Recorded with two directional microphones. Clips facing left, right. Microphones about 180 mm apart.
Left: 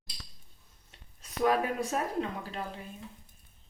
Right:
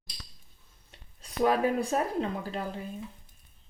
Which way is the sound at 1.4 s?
30° right (ahead or behind).